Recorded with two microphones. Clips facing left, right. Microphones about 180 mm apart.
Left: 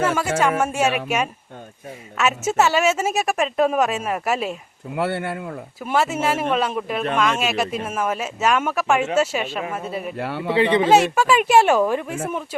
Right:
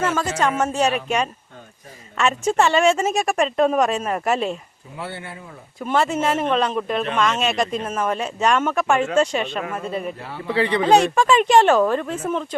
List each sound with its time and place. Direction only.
0.1 s a woman's voice: 10° left (ahead or behind)
4.9 s speech: 65° left (ahead or behind)
5.8 s a woman's voice: 5° left (ahead or behind)
10.2 s speech: 70° left (ahead or behind)
10.5 s speech: 20° left (ahead or behind)
10.8 s speech: 5° left (ahead or behind)